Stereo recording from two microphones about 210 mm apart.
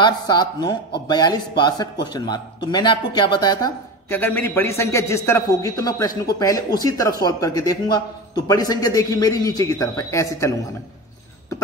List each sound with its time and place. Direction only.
0.0 s speech: 20° left (ahead or behind)